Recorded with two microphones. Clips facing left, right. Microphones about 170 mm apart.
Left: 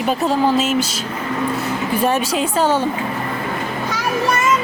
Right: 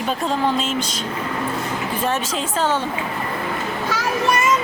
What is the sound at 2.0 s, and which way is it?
Speech, 10° left (ahead or behind).